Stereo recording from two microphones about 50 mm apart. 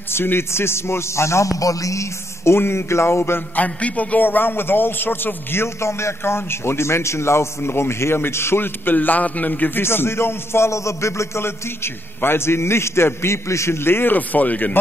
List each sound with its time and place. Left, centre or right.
0.1 s a man's voice: left
3.5 s a man's voice: left
8.9 s a man's voice: left
9.8 s a man's voice: left
14.1 s a man's voice: left